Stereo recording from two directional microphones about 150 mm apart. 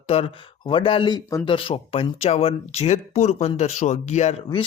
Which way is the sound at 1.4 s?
35° left (ahead or behind).